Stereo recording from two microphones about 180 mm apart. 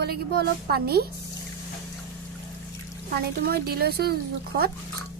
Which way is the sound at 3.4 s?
60° right (ahead or behind).